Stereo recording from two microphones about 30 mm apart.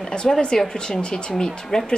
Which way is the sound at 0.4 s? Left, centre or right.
Left.